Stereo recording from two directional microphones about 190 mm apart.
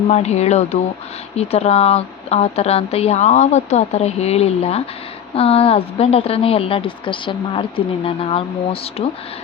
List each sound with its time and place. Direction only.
0.1 s a woman's voice: 35° left (ahead or behind)